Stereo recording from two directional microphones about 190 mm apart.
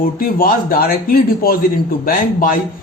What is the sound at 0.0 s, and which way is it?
Speech, 50° left (ahead or behind).